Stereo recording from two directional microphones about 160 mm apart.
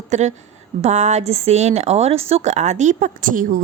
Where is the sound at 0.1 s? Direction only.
45° right (ahead or behind).